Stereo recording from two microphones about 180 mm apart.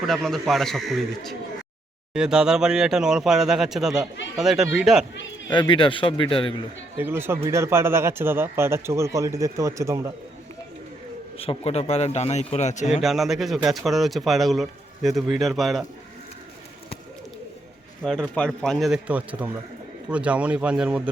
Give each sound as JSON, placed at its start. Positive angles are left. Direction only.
{"t": 0.1, "sound": "a man's voice", "side_deg": 0}
{"t": 5.5, "sound": "a man's voice", "side_deg": 25}
{"t": 6.9, "sound": "speech", "side_deg": -15}
{"t": 11.3, "sound": "a man's voice", "side_deg": 35}
{"t": 13.0, "sound": "a man's voice", "side_deg": 0}
{"t": 18.0, "sound": "a man's voice", "side_deg": 5}